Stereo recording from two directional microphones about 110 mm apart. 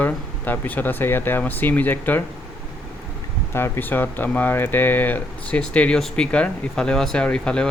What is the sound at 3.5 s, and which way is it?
Speech, 20° left (ahead or behind).